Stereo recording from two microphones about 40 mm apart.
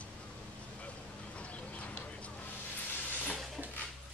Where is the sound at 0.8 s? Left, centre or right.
Left.